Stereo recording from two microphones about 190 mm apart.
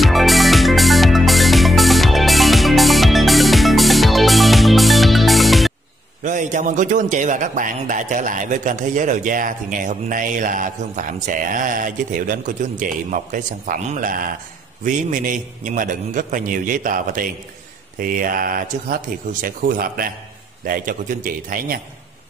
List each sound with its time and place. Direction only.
0.0 s music: centre (ahead or behind)
6.2 s a man's voice: 40° right (ahead or behind)